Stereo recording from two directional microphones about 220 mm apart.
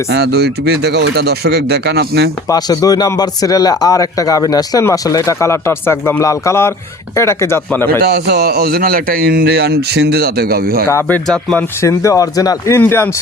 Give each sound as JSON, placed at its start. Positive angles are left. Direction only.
{"t": 0.1, "sound": "a man's voice", "side_deg": -50}
{"t": 2.5, "sound": "speech", "side_deg": 15}
{"t": 8.0, "sound": "a man's voice", "side_deg": -45}
{"t": 10.8, "sound": "speech", "side_deg": 10}